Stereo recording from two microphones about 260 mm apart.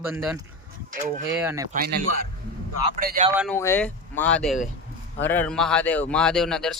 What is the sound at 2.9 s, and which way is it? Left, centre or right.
Speech, right.